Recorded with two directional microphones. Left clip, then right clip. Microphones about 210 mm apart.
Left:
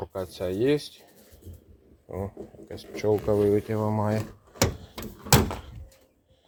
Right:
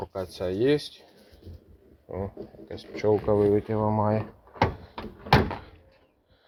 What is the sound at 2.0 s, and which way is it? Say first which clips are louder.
Speech: right 1 dB; 15° left (ahead or behind).